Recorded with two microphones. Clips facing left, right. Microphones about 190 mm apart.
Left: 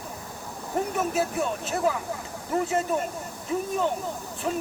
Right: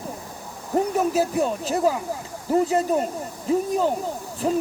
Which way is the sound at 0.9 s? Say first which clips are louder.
Right 4 dB; 35° right (ahead or behind).